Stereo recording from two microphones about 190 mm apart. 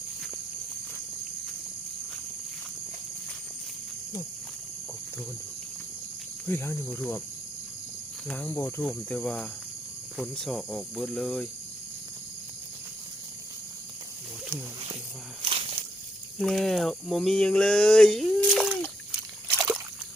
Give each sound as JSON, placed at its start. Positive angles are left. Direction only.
{"t": 6.5, "sound": "speech", "side_deg": 15}
{"t": 8.3, "sound": "cricket", "side_deg": 10}
{"t": 15.4, "sound": "slosh", "side_deg": -30}
{"t": 16.4, "sound": "a sound", "side_deg": 0}